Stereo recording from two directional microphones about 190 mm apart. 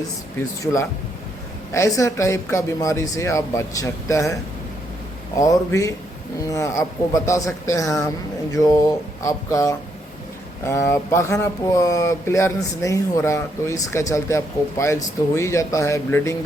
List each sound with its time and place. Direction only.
0.6 s speech: 15° left (ahead or behind)
5.4 s speech: 15° left (ahead or behind)